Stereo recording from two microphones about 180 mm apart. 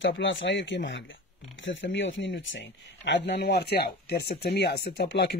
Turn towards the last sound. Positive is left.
turn(degrees=70)  # may be behind; listen again after turning